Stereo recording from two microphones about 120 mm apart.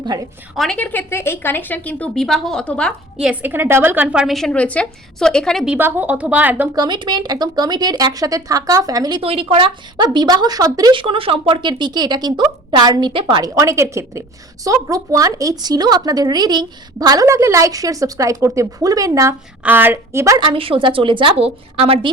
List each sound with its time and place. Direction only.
0.0 s a woman's voice: 35° right (ahead or behind)
0.5 s a woman's voice: centre (ahead or behind)
0.8 s a woman's voice: 15° left (ahead or behind)
2.1 s a woman's voice: centre (ahead or behind)
3.2 s a woman's voice: 5° right (ahead or behind)
3.5 s a woman's voice: 20° right (ahead or behind); by 5.6 s 5° left (ahead or behind)
5.6 s a woman's voice: 15° right (ahead or behind)
6.7 s speech: 40° right (ahead or behind)
9.2 s speech: 50° right (ahead or behind); by 10.9 s 30° right (ahead or behind)
10.9 s speech: 50° right (ahead or behind)
13.6 s a woman's voice: 25° right (ahead or behind)
20.4 s a woman's voice: 45° right (ahead or behind)